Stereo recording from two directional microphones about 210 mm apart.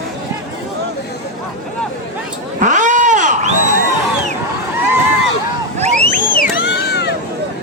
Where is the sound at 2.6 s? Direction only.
35° right (ahead or behind).